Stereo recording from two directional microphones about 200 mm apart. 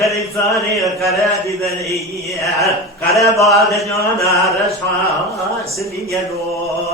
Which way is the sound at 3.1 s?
15° left (ahead or behind).